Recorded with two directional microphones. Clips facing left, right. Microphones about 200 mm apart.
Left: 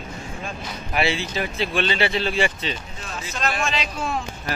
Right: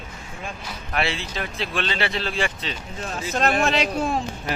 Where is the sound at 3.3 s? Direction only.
55° right (ahead or behind).